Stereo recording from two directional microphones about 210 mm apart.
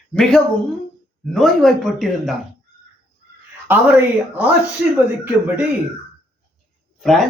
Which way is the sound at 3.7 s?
10° right (ahead or behind).